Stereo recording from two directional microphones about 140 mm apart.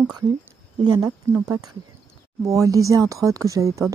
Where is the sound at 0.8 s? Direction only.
30° right (ahead or behind).